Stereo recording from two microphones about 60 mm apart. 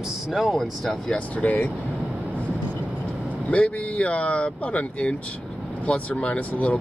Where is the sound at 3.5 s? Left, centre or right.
Left.